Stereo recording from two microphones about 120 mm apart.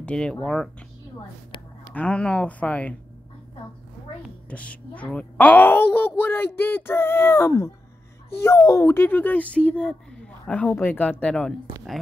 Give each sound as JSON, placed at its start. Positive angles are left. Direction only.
{"t": 0.0, "sound": "a child's voice", "side_deg": 5}
{"t": 2.0, "sound": "a child's voice", "side_deg": 10}
{"t": 4.5, "sound": "a child's voice", "side_deg": 10}